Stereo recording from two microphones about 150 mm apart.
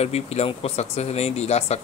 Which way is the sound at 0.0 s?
45° left (ahead or behind).